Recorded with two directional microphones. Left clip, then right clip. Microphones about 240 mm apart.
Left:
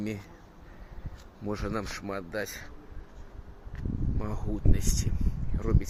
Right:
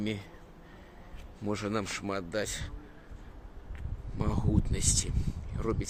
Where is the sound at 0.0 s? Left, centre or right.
Centre.